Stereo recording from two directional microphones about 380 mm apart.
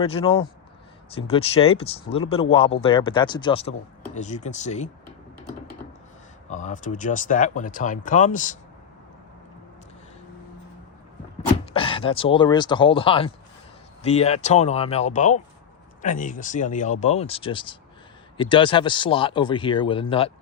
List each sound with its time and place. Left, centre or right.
0.0 s speech: centre
6.5 s speech: centre
11.7 s speech: centre